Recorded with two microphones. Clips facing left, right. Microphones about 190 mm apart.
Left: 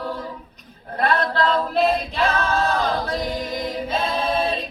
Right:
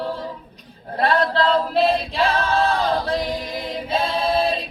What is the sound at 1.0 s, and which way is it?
Choir, 30° right (ahead or behind).